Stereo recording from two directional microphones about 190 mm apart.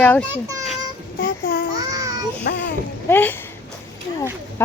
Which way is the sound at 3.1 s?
10° left (ahead or behind).